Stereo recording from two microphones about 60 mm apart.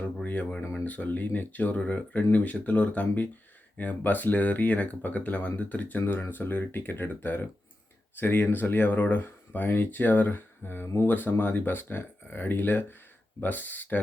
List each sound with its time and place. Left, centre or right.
0.2 s speech: left